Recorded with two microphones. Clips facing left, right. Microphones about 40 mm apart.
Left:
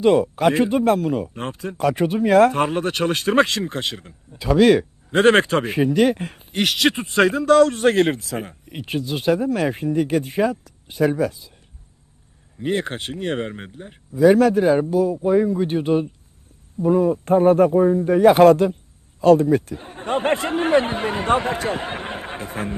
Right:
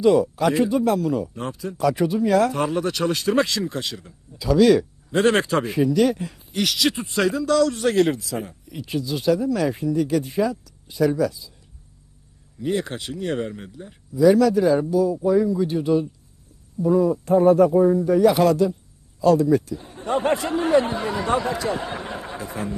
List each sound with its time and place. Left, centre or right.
0.0 s speech: left
12.5 s speech: left